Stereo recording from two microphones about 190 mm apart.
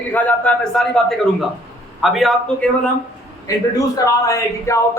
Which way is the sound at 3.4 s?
20° left (ahead or behind).